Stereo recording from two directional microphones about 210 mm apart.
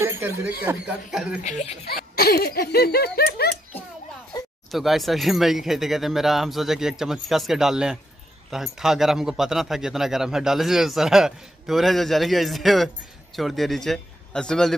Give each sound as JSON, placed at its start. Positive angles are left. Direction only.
{"t": 0.7, "sound": "speech", "side_deg": -5}
{"t": 1.4, "sound": "speech", "side_deg": 30}
{"t": 1.9, "sound": "laughter", "side_deg": 45}
{"t": 4.6, "sound": "speech", "side_deg": 0}